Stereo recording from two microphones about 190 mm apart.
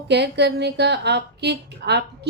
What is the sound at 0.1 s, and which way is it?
A woman's voice, 65° right (ahead or behind).